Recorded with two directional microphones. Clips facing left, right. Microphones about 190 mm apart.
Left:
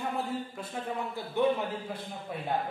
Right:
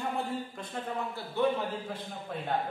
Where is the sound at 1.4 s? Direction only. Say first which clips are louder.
Left 1 dB; 15° left (ahead or behind).